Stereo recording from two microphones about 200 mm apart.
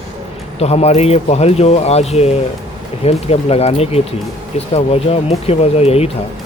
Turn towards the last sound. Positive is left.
turn(degrees=30)  # may be behind; listen again after turning